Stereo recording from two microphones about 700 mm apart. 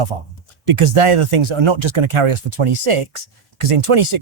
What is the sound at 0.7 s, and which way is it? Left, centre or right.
Speech, right.